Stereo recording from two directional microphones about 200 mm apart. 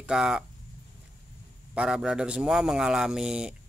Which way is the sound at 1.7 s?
5° right (ahead or behind).